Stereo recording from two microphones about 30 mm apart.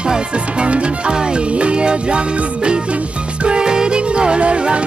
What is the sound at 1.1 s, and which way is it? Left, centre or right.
Music, right.